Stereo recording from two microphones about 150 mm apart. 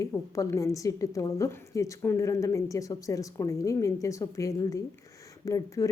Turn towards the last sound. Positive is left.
turn(degrees=20)  # may be behind; listen again after turning